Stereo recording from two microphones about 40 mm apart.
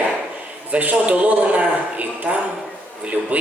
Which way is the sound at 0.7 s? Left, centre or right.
Right.